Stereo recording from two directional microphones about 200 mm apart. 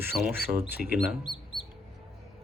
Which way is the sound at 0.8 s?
Centre (ahead or behind).